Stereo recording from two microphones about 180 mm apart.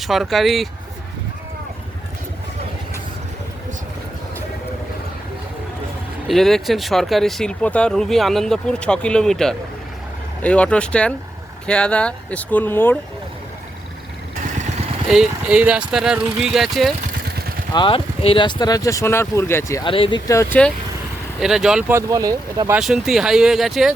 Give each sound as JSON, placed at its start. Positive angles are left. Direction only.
{"t": 0.0, "sound": "speech", "side_deg": 0}
{"t": 6.2, "sound": "speech", "side_deg": 0}
{"t": 15.1, "sound": "speech", "side_deg": -5}
{"t": 17.2, "sound": "vehicle", "side_deg": -60}
{"t": 17.7, "sound": "speech", "side_deg": 30}
{"t": 19.9, "sound": "speech", "side_deg": 30}
{"t": 21.4, "sound": "speech", "side_deg": 0}
{"t": 22.1, "sound": "speech", "side_deg": -20}
{"t": 22.8, "sound": "speech", "side_deg": 0}